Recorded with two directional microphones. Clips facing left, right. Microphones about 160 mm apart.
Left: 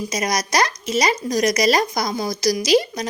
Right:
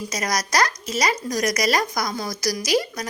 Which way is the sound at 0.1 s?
20° left (ahead or behind).